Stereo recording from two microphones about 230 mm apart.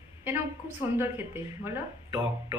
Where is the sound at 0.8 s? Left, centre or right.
Centre.